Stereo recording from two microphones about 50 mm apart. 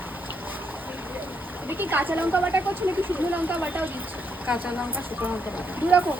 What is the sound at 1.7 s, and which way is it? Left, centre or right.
Speech, right.